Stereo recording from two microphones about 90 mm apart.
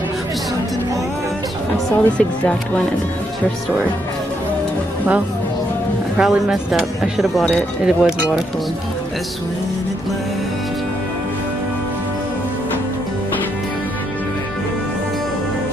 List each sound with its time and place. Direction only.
1.9 s speech: 15° left (ahead or behind)
6.1 s speech: 5° right (ahead or behind)